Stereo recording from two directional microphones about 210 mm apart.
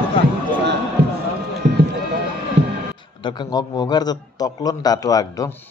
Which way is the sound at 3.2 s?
20° left (ahead or behind).